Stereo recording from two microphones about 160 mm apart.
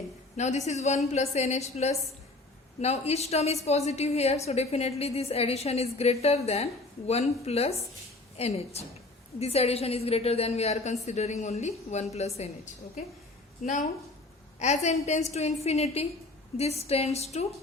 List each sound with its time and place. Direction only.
0.3 s a woman's voice: 45° left (ahead or behind)
14.6 s a woman's voice: 45° left (ahead or behind)